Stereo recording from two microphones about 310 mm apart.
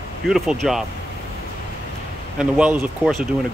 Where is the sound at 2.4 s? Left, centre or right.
Centre.